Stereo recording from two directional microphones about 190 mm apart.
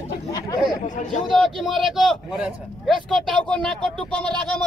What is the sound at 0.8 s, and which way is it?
Speech, 40° left (ahead or behind).